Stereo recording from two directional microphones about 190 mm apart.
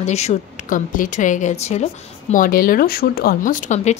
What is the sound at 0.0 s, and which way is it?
Speech, 35° left (ahead or behind).